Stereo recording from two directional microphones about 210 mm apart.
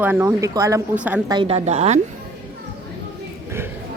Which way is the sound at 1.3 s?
25° right (ahead or behind).